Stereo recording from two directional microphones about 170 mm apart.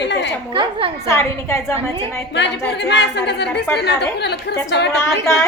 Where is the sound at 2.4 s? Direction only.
90° left.